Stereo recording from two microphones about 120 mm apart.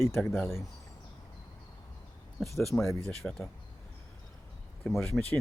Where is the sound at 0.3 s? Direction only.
Centre (ahead or behind).